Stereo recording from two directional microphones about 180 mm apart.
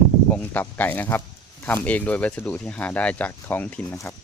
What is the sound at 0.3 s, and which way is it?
Speech, 10° left (ahead or behind).